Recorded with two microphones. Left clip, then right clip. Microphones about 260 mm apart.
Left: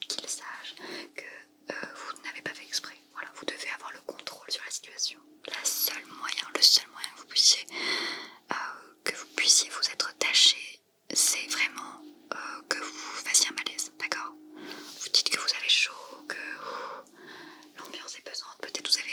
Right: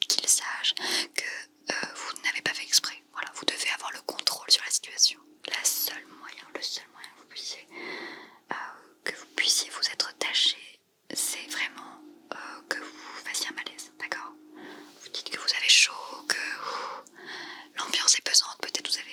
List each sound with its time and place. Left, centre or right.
0.0 s whispering: centre
6.2 s whispering: centre
15.4 s whispering: centre
17.7 s whispering: right
18.6 s whispering: centre